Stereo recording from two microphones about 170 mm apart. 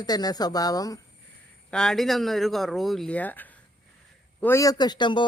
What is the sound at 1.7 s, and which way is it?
Speech, 5° left (ahead or behind).